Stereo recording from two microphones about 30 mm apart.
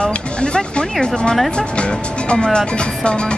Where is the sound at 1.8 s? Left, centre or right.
Left.